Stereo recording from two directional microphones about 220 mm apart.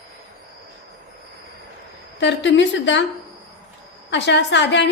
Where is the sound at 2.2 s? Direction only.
55° left (ahead or behind).